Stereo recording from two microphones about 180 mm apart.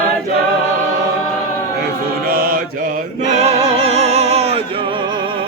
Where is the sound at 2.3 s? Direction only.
55° right (ahead or behind).